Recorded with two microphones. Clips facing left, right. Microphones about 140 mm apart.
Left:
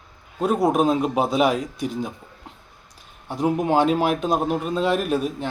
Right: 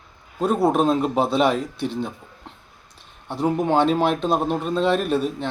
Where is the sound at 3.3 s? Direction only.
10° left (ahead or behind).